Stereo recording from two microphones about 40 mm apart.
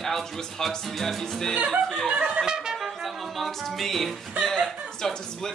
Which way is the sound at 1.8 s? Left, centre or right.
Centre.